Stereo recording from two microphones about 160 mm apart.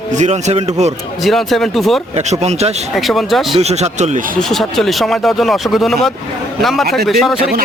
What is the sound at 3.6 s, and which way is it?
Speech, 45° right (ahead or behind).